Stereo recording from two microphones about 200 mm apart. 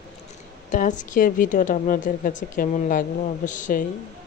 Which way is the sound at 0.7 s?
40° left (ahead or behind).